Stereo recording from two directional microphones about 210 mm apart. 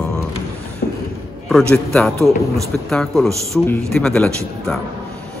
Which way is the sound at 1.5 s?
5° left (ahead or behind).